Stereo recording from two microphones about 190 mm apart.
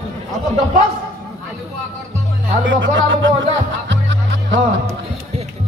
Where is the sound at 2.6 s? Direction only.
80° right.